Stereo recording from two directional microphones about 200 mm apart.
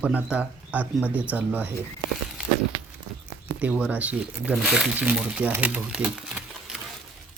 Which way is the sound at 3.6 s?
5° right (ahead or behind).